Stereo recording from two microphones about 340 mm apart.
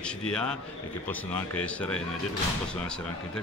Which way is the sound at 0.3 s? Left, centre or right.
Centre.